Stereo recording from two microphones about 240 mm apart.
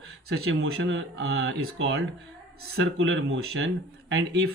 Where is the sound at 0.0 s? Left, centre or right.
Right.